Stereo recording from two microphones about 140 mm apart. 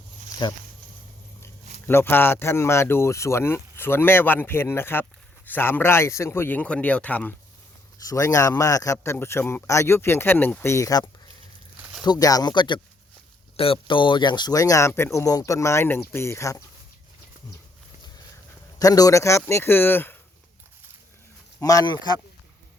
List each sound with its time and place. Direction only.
0.3 s a sound: 25° left (ahead or behind)
1.9 s speech: 15° left (ahead or behind)
7.9 s speech: 25° left (ahead or behind)
12.0 s speech: 30° left (ahead or behind)
18.8 s speech: 25° left (ahead or behind)
21.6 s speech: 25° left (ahead or behind)